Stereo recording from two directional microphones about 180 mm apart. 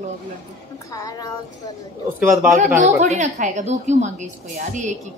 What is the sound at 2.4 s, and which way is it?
A woman's voice, 40° right (ahead or behind).